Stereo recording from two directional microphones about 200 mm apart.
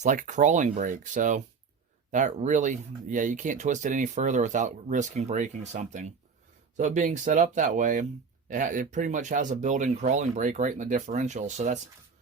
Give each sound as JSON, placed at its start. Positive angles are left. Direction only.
{"t": 0.0, "sound": "speech", "side_deg": -40}